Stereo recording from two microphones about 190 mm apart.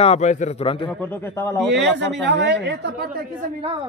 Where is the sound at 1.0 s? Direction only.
10° left (ahead or behind).